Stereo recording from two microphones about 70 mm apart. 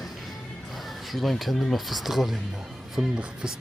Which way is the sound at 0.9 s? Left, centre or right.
Centre.